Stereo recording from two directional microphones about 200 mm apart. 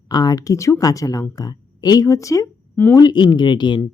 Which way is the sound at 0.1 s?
20° left (ahead or behind).